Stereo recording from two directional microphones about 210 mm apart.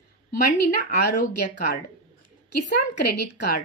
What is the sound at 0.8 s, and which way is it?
Speech, 35° left (ahead or behind).